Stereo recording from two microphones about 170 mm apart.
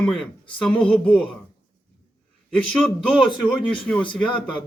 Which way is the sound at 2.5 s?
5° left (ahead or behind).